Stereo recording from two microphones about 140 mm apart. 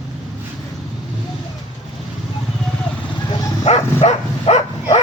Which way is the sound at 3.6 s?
50° left (ahead or behind).